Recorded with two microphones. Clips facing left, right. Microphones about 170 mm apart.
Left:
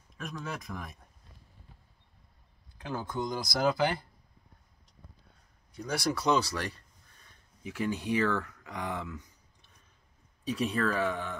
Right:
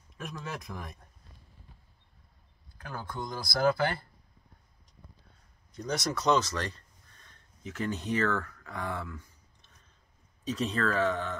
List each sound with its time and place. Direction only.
0.2 s speech: centre (ahead or behind)
2.9 s speech: 10° left (ahead or behind)
5.8 s speech: 10° left (ahead or behind)